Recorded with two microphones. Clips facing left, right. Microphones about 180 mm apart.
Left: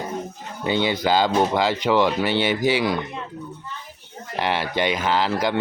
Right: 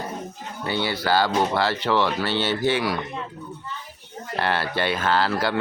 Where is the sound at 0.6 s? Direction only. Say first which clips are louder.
Left 4 dB; 15° left (ahead or behind).